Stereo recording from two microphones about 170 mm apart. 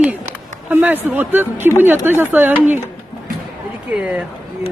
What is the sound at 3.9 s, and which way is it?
Speech, 10° right (ahead or behind).